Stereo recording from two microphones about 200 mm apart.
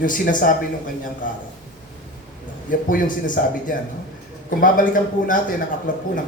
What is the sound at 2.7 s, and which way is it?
A man's voice, 40° left (ahead or behind).